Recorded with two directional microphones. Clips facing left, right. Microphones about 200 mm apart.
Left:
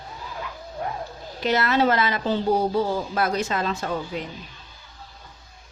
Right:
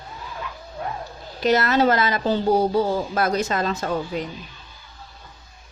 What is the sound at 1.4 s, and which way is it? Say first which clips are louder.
A woman's voice: right 3 dB; 40° right (ahead or behind).